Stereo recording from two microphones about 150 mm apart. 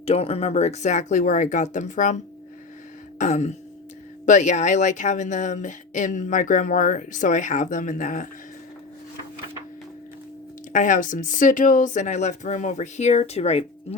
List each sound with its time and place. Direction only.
0.0 s speech: 45° left (ahead or behind)
3.2 s speech: 50° left (ahead or behind)
10.7 s speech: 60° left (ahead or behind); by 13.7 s 45° left (ahead or behind)